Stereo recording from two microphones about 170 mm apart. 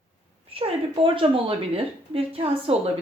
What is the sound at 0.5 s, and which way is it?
A woman's voice, 35° right (ahead or behind).